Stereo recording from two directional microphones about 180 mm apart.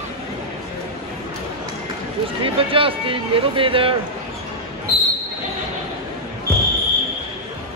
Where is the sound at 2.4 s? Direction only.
30° right (ahead or behind).